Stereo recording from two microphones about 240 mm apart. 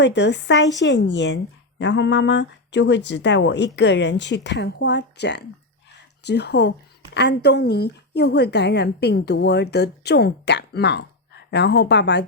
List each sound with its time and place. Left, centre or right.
0.0 s speech: left